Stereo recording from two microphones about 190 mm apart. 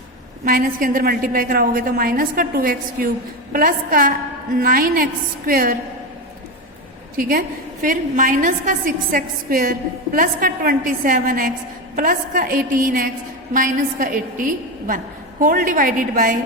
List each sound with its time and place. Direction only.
0.4 s a woman's voice: 45° right (ahead or behind)
7.2 s a woman's voice: 50° right (ahead or behind)